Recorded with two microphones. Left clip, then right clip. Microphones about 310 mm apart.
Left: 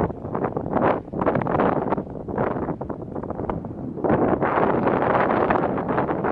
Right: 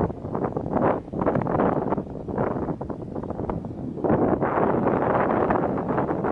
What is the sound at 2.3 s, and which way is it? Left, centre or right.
Wind noise, centre.